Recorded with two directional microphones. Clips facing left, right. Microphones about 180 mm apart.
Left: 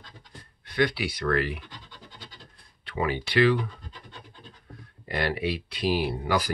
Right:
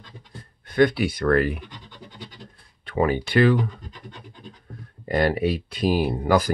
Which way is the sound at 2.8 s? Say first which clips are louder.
Right 6 dB; 45° right (ahead or behind).